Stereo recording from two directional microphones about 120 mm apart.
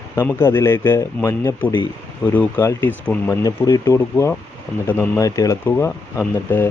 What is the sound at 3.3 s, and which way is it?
Speech, 30° left (ahead or behind).